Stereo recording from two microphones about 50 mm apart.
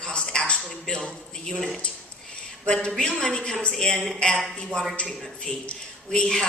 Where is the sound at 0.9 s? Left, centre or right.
Centre.